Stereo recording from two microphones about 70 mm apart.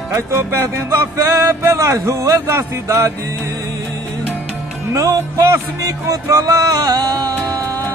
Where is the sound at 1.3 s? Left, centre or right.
Right.